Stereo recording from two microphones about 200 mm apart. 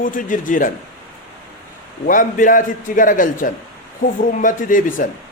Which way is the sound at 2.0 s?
40° left (ahead or behind).